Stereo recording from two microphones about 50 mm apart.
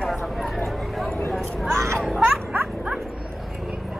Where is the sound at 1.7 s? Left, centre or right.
Right.